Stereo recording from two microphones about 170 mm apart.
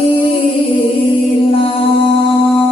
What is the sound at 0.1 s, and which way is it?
Music, 30° left (ahead or behind).